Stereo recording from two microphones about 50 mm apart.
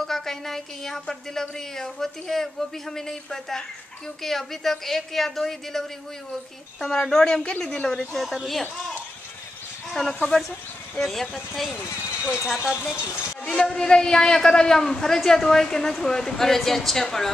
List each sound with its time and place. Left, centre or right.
0.0 s a man's voice: centre; by 8.0 s left
8.0 s a woman's voice: centre
9.8 s a woman's voice: centre
11.7 s speech: left
12.4 s speech: centre
13.5 s a man's voice: centre